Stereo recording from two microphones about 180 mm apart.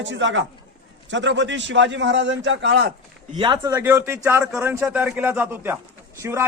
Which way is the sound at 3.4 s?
20° right (ahead or behind).